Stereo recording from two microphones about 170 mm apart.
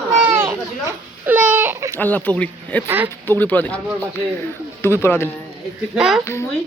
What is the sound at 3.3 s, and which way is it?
Speech, 10° left (ahead or behind).